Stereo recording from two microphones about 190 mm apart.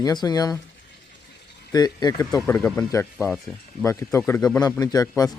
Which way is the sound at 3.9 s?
15° left (ahead or behind).